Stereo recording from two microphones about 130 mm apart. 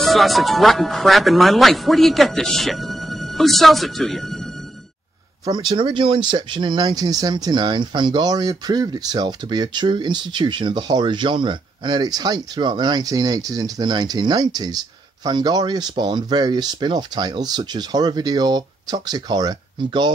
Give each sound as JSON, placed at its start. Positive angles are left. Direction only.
{"t": 0.0, "sound": "speech", "side_deg": 0}
{"t": 5.4, "sound": "speech", "side_deg": -35}